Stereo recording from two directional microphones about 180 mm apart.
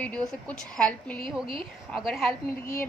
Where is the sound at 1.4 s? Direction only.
30° right (ahead or behind).